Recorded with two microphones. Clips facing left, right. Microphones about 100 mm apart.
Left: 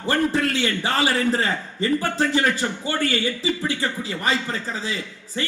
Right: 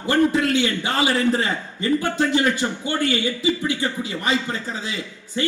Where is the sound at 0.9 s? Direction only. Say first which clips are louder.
Right 2 dB; 20° right (ahead or behind).